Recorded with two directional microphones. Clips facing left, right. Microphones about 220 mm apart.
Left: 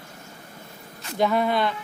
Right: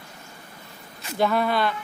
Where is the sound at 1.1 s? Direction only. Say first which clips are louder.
Even; 15° left (ahead or behind).